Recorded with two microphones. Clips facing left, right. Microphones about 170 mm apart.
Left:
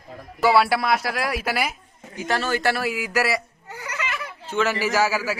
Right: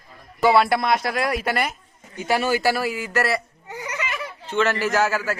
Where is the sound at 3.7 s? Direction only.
20° right (ahead or behind).